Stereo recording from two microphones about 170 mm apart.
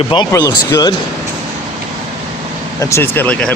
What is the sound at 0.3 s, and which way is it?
Speech, 20° left (ahead or behind).